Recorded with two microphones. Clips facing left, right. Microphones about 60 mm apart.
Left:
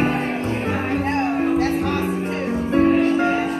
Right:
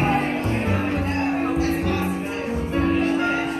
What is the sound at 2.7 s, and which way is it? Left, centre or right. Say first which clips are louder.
Music: left 5 dB; left.